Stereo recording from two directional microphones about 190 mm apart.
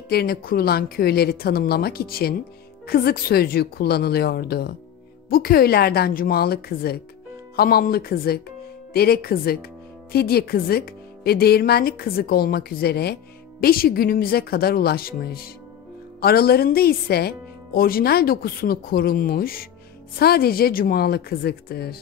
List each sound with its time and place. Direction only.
0.1 s a woman's voice: 55° left (ahead or behind)